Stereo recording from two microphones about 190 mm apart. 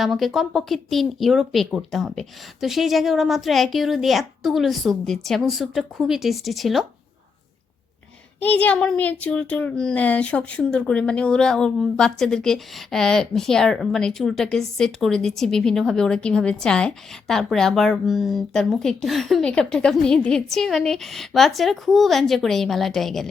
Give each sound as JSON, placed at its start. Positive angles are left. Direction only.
{"t": 0.0, "sound": "speech", "side_deg": 0}
{"t": 8.4, "sound": "speech", "side_deg": 10}